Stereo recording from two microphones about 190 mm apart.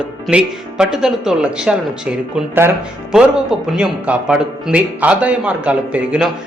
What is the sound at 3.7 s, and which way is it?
Speech, 5° right (ahead or behind).